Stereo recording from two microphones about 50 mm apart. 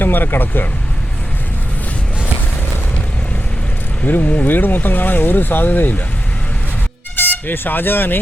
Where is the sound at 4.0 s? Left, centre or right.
Left.